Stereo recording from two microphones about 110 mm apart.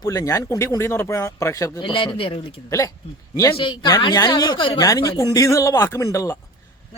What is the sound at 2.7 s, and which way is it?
Speech, 30° left (ahead or behind).